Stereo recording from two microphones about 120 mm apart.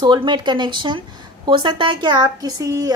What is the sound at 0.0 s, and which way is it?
A woman's voice, 40° right (ahead or behind).